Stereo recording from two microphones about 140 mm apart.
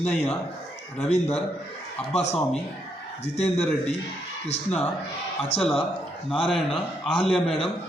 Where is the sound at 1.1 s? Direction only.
45° left (ahead or behind).